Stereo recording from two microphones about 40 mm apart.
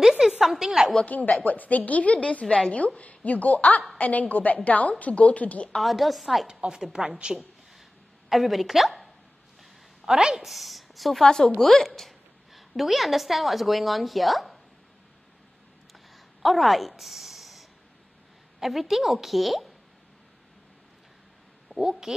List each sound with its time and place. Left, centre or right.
0.0 s a sound: centre
1.0 s a woman's voice: left
5.8 s a woman's voice: centre
6.4 s a woman's voice: right
8.3 s a woman's voice: centre
10.0 s a woman's voice: centre
10.4 s speech: centre
11.2 s a woman's voice: centre
16.4 s a woman's voice: centre
21.7 s a woman's voice: centre